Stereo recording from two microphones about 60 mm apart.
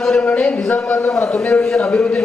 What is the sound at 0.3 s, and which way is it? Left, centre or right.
A man's voice, left.